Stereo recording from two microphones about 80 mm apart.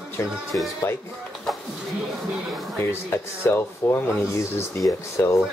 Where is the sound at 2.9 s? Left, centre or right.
Left.